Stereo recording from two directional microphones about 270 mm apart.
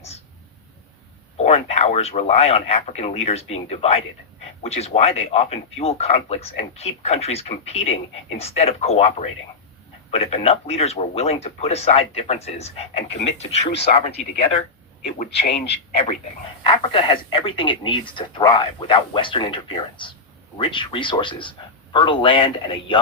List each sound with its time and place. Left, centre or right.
1.4 s a man's voice: left
15.2 s a man's voice: left